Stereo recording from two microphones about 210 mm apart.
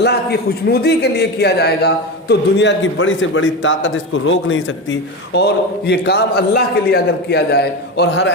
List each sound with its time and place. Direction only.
0.0 s a man's voice: 50° left (ahead or behind)